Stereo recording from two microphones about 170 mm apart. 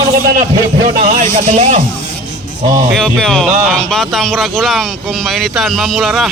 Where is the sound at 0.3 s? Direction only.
60° right (ahead or behind); by 1.8 s 45° right (ahead or behind).